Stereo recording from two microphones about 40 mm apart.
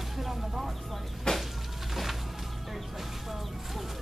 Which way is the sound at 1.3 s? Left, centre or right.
Centre.